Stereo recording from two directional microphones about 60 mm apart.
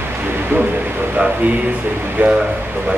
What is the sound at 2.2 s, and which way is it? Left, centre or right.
Speech, right.